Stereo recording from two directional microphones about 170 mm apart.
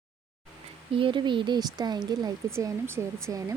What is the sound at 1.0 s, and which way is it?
Speech, 30° right (ahead or behind).